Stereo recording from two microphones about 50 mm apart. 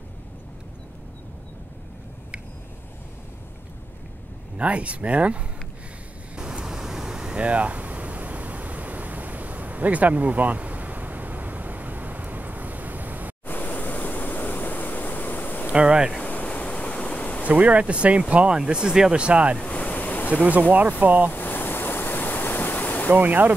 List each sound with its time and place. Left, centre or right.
4.6 s speech: right
6.3 s a sound: centre; by 13.3 s right
13.5 s pink noise: left
15.7 s speech: right
16.3 s insect: left
17.5 s speech: right
19.6 s a sound: left
21.0 s speech: right
21.3 s ocean: left
23.1 s speech: right